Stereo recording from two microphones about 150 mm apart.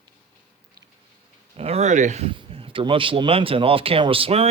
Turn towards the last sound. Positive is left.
turn(degrees=-40)  # may be behind; listen again after turning